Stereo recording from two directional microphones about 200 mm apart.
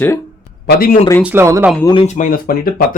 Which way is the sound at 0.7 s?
45° left (ahead or behind).